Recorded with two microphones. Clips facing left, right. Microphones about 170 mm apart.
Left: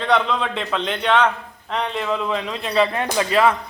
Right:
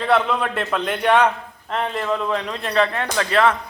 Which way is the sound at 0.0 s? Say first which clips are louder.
Right 1 dB; 5° right (ahead or behind).